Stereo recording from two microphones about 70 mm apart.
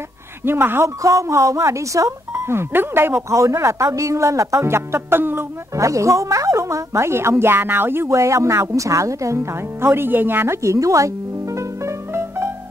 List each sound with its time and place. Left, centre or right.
0.5 s speech: right
0.8 s speech: right
3.3 s speech: right
5.8 s speech: right
11.5 s music: right